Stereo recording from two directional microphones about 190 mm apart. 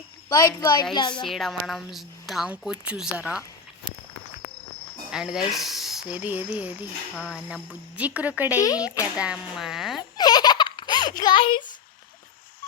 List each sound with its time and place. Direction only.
0.3 s a child's voice: 20° left (ahead or behind)
1.2 s a woman's voice: centre (ahead or behind)
5.1 s a woman's voice: 5° right (ahead or behind)
8.6 s speech: 20° left (ahead or behind)
9.1 s speech: 5° right (ahead or behind)
10.2 s baby laughter: 20° left (ahead or behind)